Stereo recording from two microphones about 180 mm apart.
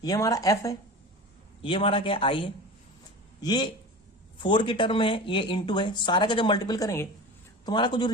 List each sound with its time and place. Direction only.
0.0 s speech: 20° left (ahead or behind)
1.6 s speech: 30° left (ahead or behind)